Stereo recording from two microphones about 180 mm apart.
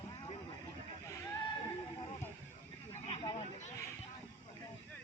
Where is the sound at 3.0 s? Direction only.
30° left (ahead or behind).